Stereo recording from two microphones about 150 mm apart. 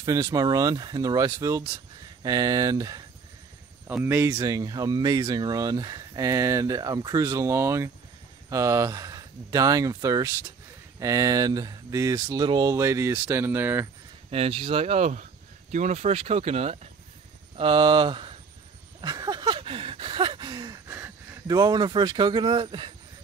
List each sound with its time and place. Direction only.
0.0 s speech: 20° right (ahead or behind)
14.3 s speech: 40° right (ahead or behind)
17.6 s speech: 30° right (ahead or behind)
18.9 s a sound: 25° right (ahead or behind)
20.9 s a sound: 15° right (ahead or behind)
21.5 s speech: 30° right (ahead or behind)